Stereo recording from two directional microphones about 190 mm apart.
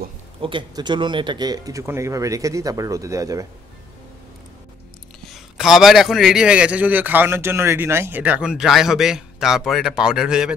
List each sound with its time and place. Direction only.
0.4 s speech: 25° right (ahead or behind)
5.2 s a man's voice: centre (ahead or behind)